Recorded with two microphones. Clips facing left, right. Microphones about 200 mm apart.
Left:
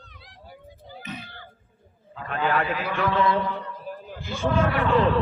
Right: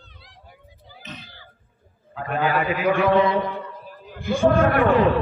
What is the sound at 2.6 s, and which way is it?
Speech, 50° right (ahead or behind).